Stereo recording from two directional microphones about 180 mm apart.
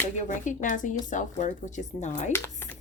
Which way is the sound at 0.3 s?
45° left (ahead or behind).